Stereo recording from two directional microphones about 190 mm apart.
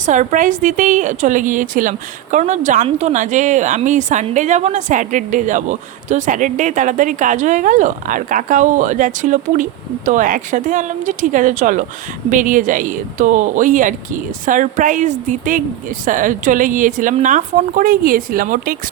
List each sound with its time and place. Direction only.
0.0 s a woman's voice: 40° right (ahead or behind)